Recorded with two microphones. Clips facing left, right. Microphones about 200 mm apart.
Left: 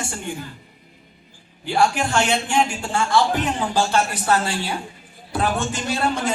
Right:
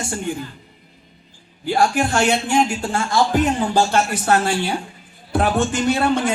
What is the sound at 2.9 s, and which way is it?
Speech, 55° right (ahead or behind).